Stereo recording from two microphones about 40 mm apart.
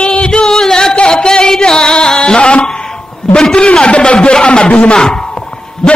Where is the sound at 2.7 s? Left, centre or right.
Centre.